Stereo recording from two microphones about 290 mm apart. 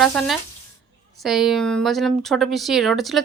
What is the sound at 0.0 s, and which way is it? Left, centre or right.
Speech, centre.